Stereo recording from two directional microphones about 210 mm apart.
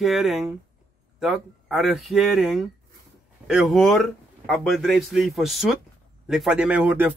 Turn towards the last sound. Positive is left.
turn(degrees=-5)  # may be behind; listen again after turning